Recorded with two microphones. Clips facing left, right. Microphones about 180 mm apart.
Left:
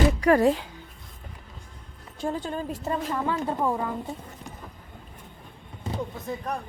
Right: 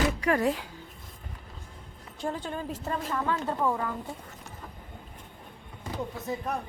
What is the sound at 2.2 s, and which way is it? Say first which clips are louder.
A woman's voice: left 3 dB; 15° left (ahead or behind).